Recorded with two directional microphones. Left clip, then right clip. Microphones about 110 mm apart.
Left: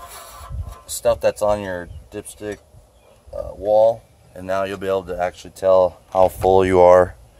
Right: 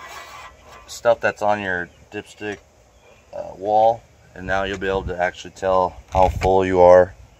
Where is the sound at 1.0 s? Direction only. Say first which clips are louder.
Even; 65° left (ahead or behind).